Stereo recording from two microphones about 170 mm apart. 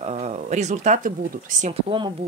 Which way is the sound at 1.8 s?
30° right (ahead or behind).